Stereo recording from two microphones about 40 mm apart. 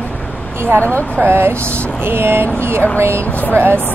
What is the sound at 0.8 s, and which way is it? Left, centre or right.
Speech, left.